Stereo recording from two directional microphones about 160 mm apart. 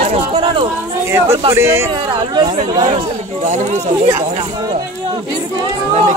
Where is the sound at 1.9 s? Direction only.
30° right (ahead or behind).